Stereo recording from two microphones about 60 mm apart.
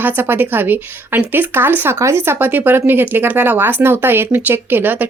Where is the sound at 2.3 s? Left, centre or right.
Right.